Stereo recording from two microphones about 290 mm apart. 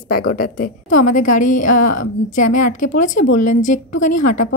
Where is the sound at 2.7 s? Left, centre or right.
Left.